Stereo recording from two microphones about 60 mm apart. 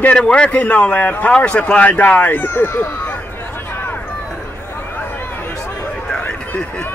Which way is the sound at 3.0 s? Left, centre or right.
Left.